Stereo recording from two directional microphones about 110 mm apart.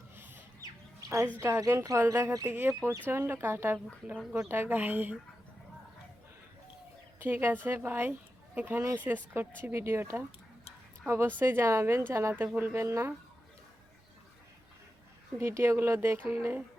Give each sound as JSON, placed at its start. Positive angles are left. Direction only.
{"t": 0.6, "sound": "bird", "side_deg": -30}
{"t": 1.4, "sound": "a woman's voice", "side_deg": -25}
{"t": 7.2, "sound": "a woman's voice", "side_deg": -20}
{"t": 15.4, "sound": "speech", "side_deg": -25}